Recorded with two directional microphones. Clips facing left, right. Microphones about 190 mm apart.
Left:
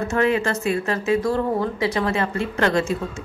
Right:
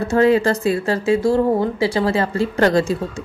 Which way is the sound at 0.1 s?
35° right (ahead or behind).